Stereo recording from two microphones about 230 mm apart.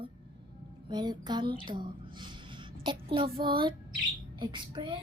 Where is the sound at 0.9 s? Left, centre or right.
Centre.